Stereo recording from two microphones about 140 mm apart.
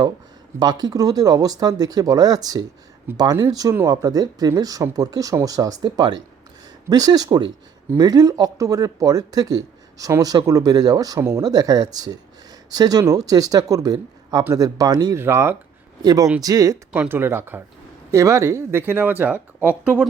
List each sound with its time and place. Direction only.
0.6 s speech: 30° right (ahead or behind)
15.2 s speech: 15° right (ahead or behind)
16.9 s speech: 15° right (ahead or behind)